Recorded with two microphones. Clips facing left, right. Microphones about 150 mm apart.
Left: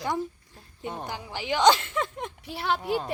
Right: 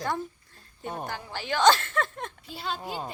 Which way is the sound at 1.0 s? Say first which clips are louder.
Left 1 dB; 15° left (ahead or behind).